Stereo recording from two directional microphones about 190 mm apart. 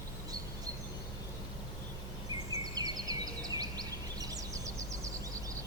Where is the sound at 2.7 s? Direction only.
20° right (ahead or behind).